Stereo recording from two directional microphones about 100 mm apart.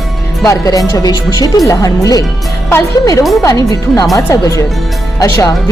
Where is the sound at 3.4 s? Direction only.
35° left (ahead or behind).